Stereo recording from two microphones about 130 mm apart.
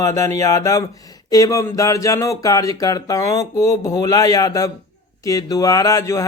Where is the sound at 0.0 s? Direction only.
25° left (ahead or behind).